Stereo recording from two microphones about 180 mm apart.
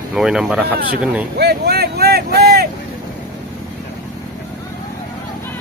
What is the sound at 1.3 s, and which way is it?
Speech, 60° right (ahead or behind).